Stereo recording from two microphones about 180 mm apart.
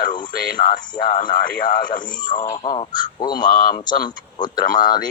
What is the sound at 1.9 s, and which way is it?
Speech, 45° left (ahead or behind).